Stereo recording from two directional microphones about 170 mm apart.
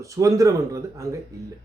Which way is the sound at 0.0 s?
20° right (ahead or behind).